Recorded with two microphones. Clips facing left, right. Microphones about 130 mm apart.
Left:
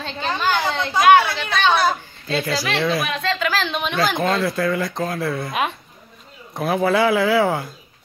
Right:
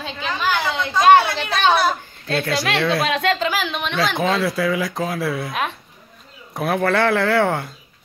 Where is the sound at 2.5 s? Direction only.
65° right (ahead or behind).